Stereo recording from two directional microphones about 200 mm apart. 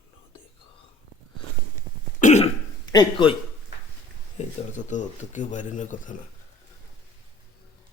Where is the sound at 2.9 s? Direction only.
20° left (ahead or behind).